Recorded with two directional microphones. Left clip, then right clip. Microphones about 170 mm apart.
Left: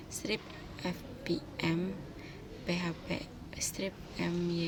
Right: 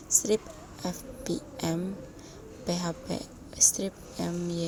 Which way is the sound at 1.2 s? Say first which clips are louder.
Right 2 dB; 25° right (ahead or behind).